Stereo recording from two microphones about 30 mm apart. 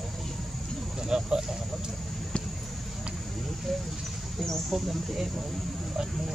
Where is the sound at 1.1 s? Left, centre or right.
Right.